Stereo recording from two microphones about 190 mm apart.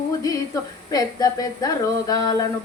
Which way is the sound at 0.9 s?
20° left (ahead or behind).